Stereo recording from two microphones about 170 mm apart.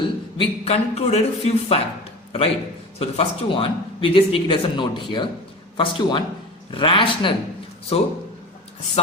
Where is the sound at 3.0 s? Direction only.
35° left (ahead or behind).